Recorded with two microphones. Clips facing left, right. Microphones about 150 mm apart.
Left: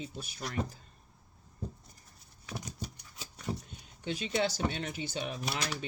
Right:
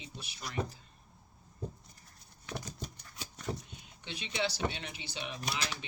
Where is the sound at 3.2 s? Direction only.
5° left (ahead or behind).